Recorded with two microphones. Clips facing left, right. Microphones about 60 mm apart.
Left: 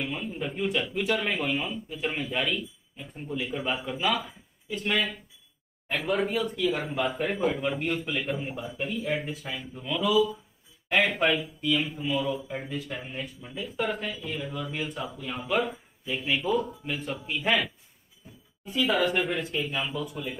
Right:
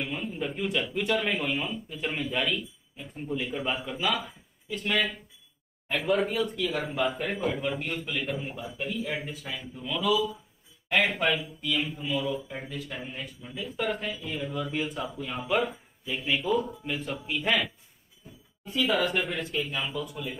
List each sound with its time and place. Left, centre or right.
0.0 s speech: centre
18.9 s speech: centre